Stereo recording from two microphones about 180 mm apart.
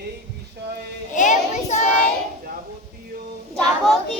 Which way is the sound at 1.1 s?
45° left (ahead or behind).